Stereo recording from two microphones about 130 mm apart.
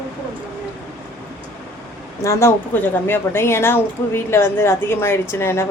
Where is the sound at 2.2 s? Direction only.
20° left (ahead or behind).